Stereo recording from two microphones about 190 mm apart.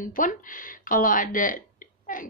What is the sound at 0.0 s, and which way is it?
A woman's voice, 45° left (ahead or behind).